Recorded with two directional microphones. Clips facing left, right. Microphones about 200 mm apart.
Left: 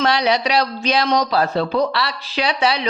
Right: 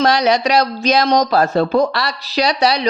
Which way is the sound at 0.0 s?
45° right (ahead or behind).